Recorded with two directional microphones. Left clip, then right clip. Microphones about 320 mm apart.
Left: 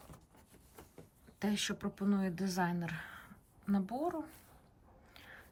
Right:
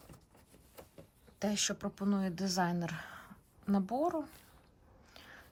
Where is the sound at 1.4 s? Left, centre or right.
Centre.